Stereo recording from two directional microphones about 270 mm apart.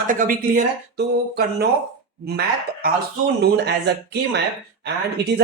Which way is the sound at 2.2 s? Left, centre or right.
Right.